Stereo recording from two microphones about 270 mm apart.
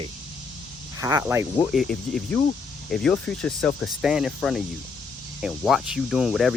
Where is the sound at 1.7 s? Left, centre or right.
Centre.